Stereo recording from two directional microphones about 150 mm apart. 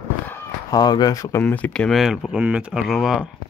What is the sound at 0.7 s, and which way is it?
Speech, 25° left (ahead or behind).